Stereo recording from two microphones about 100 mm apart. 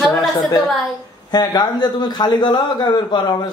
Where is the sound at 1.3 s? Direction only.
45° left (ahead or behind).